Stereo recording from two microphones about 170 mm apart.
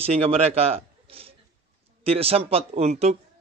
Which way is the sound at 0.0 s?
35° right (ahead or behind).